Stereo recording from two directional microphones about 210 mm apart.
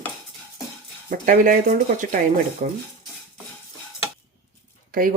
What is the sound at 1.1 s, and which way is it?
Speech, 40° right (ahead or behind).